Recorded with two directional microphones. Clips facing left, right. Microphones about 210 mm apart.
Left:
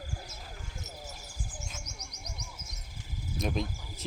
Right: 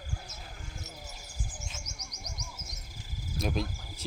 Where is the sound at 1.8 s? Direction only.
60° left (ahead or behind).